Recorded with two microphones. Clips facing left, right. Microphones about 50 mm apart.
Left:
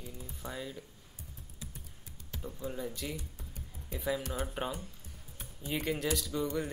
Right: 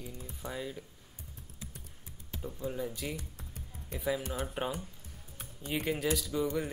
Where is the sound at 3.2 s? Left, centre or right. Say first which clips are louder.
Right 1 dB; right.